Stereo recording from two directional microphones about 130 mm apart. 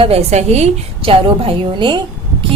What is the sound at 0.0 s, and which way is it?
A woman's voice, 50° right (ahead or behind).